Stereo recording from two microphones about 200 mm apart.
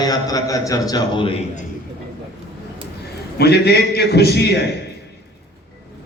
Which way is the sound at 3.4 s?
55° left (ahead or behind).